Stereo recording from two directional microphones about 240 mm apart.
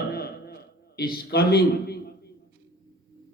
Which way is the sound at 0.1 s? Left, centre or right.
Left.